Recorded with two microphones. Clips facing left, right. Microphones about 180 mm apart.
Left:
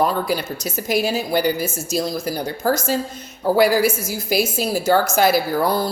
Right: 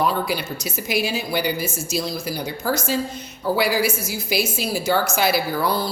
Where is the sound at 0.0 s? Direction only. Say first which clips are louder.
Left 2 dB; 45° left (ahead or behind).